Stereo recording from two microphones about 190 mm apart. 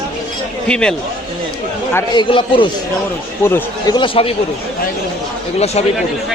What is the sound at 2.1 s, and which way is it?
Speech, 25° left (ahead or behind).